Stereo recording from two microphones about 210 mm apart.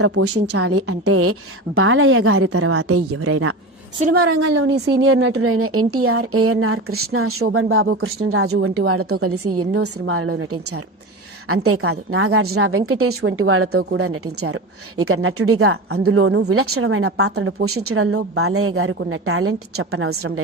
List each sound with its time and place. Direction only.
0.0 s speech: 90° right
4.2 s a woman's voice: 75° right (ahead or behind); by 15.8 s 90° right
16.1 s a woman's voice: 60° right (ahead or behind); by 20.4 s 90° right